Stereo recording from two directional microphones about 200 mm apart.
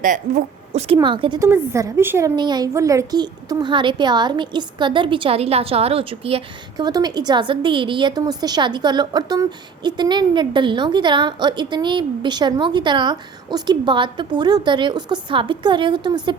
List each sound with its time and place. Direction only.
0.0 s a woman's voice: 40° right (ahead or behind); by 1.5 s 25° right (ahead or behind)
1.5 s a woman's voice: 15° right (ahead or behind)